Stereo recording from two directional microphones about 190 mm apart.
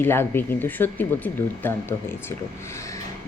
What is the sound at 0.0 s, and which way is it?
Speech, 10° left (ahead or behind).